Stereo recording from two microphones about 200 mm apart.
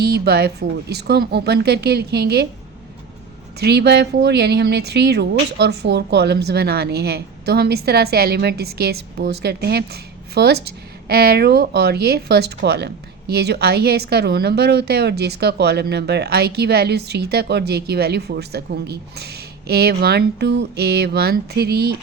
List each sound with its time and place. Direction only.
0.0 s speech: 55° right (ahead or behind)
3.6 s speech: 55° right (ahead or behind)